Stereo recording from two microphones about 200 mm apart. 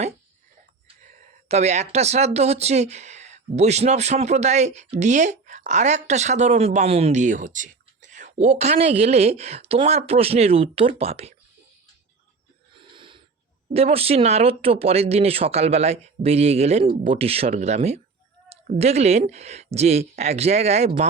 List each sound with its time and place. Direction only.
1.5 s speech: 35° right (ahead or behind)
12.7 s snort: 25° right (ahead or behind)
13.7 s speech: 30° right (ahead or behind)